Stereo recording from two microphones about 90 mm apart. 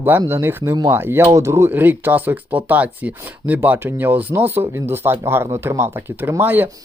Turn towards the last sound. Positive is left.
turn(degrees=-20)  # may be behind; listen again after turning